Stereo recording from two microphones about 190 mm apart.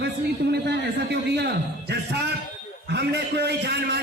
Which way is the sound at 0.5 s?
60° right (ahead or behind).